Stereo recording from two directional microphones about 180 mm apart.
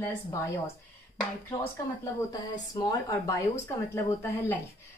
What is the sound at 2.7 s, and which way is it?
A woman's voice, 20° left (ahead or behind).